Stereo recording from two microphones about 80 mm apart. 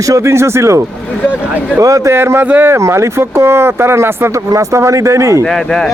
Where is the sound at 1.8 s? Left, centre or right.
Right.